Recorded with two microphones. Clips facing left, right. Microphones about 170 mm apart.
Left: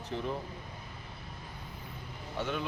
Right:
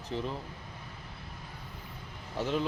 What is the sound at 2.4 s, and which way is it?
Speech, 30° right (ahead or behind).